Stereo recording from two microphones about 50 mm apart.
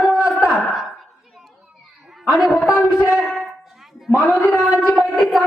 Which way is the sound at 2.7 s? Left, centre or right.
Left.